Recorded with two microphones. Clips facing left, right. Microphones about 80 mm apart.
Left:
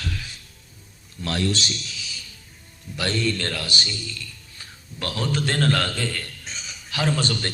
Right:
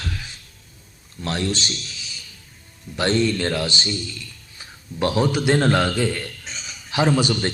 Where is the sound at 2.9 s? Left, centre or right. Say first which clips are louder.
Right 5 dB; right.